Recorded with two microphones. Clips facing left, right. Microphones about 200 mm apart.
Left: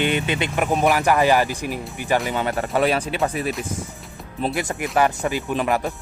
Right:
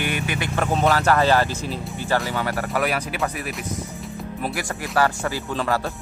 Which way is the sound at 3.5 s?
Centre (ahead or behind).